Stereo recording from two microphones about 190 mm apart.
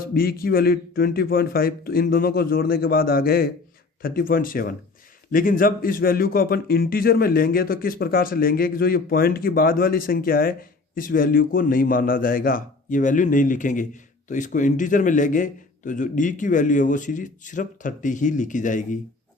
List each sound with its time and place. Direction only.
0.1 s a man's voice: 50° left (ahead or behind)